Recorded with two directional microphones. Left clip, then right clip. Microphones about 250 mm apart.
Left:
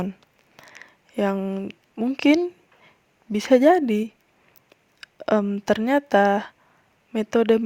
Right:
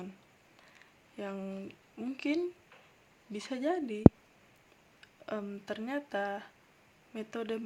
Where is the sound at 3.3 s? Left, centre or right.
Left.